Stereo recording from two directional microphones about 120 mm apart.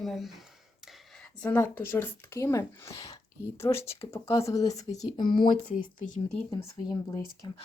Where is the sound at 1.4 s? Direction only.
15° left (ahead or behind).